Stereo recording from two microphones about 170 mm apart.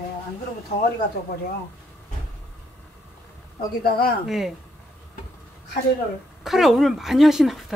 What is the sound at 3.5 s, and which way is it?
Speech, 60° left (ahead or behind).